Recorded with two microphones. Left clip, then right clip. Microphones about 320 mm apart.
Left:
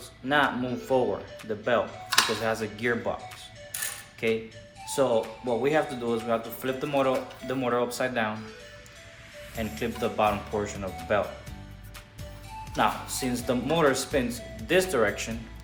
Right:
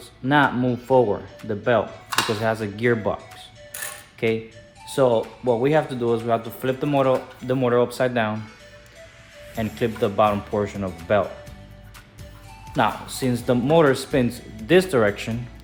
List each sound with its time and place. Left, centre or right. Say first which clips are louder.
0.3 s speech: right 6 dB; right
4.2 s speech: right 4 dB; right
9.6 s speech: right 7 dB; right
12.7 s speech: right 4 dB; right